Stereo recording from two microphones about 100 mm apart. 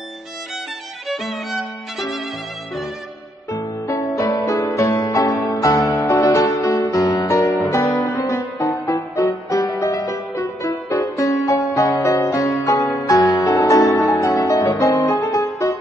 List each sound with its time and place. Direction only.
1.0 s violin: centre (ahead or behind)
3.5 s music: 30° left (ahead or behind)